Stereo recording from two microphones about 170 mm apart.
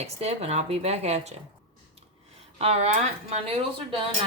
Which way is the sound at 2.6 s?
40° right (ahead or behind).